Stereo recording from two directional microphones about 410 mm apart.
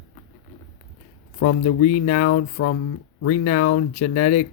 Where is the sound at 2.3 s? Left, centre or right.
Left.